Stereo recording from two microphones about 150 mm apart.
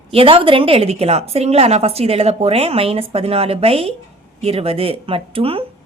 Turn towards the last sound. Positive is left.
turn(degrees=-40)  # may be behind; listen again after turning